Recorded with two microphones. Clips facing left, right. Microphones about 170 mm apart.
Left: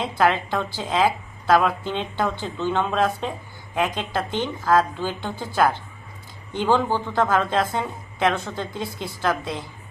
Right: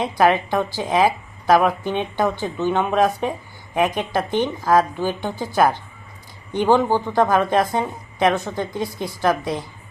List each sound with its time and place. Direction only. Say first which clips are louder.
0.2 s speech: right 4 dB; 15° right (ahead or behind)